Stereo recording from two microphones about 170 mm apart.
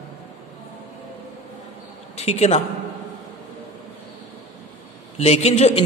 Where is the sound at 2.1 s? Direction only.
40° left (ahead or behind).